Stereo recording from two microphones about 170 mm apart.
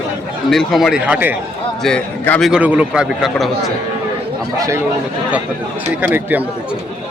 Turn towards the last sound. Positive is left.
turn(degrees=-10)  # may be behind; listen again after turning